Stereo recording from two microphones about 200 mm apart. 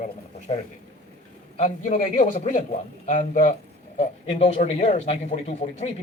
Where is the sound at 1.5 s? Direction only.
40° left (ahead or behind).